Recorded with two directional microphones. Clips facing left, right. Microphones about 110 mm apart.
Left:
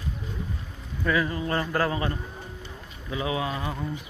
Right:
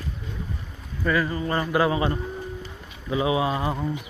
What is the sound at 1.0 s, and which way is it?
Speech, centre (ahead or behind).